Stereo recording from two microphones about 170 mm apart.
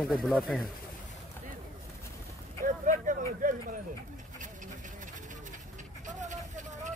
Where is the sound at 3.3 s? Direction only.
50° right (ahead or behind).